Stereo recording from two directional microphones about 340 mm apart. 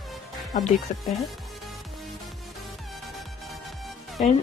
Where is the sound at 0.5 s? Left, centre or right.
Left.